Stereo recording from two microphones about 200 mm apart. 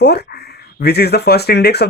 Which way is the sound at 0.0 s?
55° left (ahead or behind).